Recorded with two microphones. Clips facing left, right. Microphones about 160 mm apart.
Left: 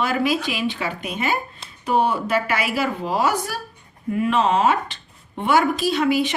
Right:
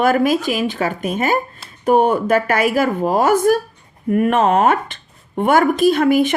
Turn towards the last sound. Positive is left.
turn(degrees=-50)  # may be behind; listen again after turning